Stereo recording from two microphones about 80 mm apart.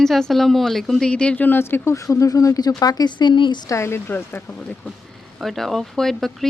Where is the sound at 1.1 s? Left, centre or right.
Centre; by 3.6 s left.